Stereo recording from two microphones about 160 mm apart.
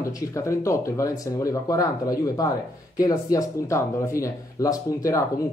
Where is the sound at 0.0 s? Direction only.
20° left (ahead or behind).